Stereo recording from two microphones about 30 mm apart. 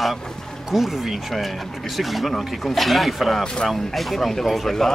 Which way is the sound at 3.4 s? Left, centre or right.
Left.